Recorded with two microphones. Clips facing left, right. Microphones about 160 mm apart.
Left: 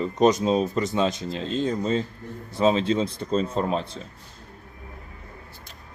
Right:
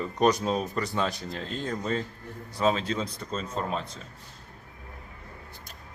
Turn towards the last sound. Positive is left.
turn(degrees=30)  # may be behind; listen again after turning